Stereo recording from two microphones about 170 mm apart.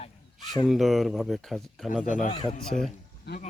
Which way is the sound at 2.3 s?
30° left (ahead or behind).